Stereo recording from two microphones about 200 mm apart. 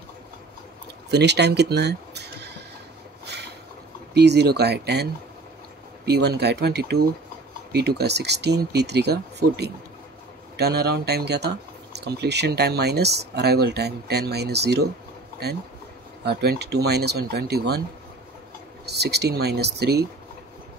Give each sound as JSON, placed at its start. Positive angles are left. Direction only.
{"t": 1.1, "sound": "speech", "side_deg": -55}
{"t": 3.3, "sound": "a sound", "side_deg": -55}
{"t": 4.1, "sound": "speech", "side_deg": -55}
{"t": 6.0, "sound": "speech", "side_deg": -55}
{"t": 16.3, "sound": "speech", "side_deg": -55}
{"t": 18.9, "sound": "speech", "side_deg": -55}